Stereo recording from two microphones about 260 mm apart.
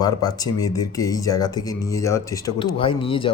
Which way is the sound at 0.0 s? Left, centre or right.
Centre.